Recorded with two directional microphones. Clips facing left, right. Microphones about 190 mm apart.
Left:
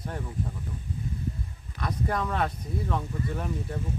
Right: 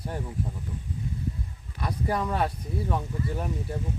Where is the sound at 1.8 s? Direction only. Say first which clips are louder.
Right 1 dB; 10° right (ahead or behind).